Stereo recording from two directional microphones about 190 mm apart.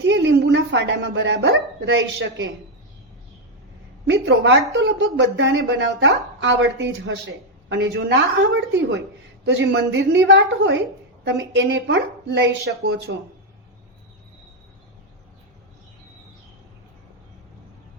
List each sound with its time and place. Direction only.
0.0 s a woman's voice: 65° right (ahead or behind)
4.0 s a woman's voice: 65° right (ahead or behind)